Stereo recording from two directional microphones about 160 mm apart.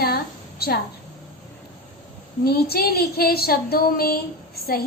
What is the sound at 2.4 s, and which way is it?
A woman's voice, 75° left (ahead or behind).